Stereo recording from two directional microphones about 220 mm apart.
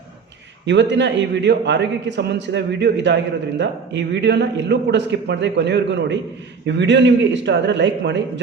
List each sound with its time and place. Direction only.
0.6 s a man's voice: 55° right (ahead or behind)